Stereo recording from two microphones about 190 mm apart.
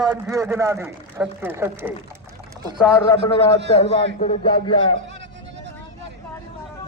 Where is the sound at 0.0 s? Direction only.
20° right (ahead or behind).